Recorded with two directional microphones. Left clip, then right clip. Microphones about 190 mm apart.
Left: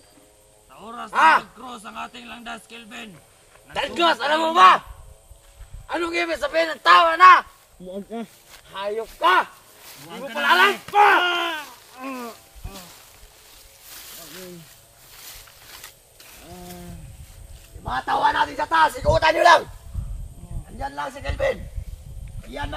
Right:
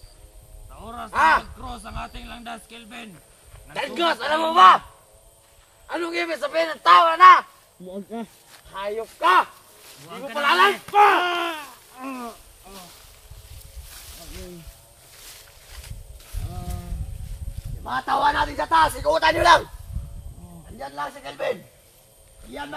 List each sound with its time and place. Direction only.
0.7 s music: 5° left (ahead or behind)
1.1 s speech: 35° left (ahead or behind)
1.4 s speech: 5° left (ahead or behind)
3.7 s a man's voice: 30° left (ahead or behind)
5.9 s a man's voice: 30° left (ahead or behind)
7.9 s speech: 5° right (ahead or behind)
8.6 s a man's voice: 35° left (ahead or behind)
9.2 s speech: 10° left (ahead or behind)
10.3 s speech: 5° right (ahead or behind)
17.8 s speech: centre (ahead or behind)
20.7 s speech: 10° left (ahead or behind)